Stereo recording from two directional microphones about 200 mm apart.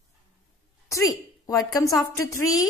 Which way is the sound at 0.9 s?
15° left (ahead or behind).